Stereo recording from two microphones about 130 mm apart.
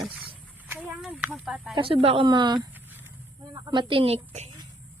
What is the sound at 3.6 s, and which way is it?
Speech, 40° right (ahead or behind).